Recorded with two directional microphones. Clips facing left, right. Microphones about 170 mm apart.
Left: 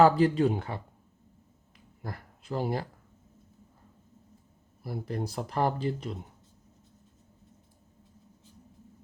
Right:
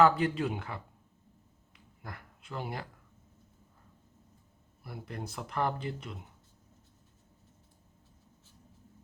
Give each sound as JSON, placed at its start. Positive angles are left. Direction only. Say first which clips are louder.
{"t": 0.0, "sound": "speech", "louder": "left 4 dB", "side_deg": 35}
{"t": 2.0, "sound": "speech", "louder": "left 6 dB", "side_deg": 35}
{"t": 4.8, "sound": "speech", "louder": "left 8 dB", "side_deg": 35}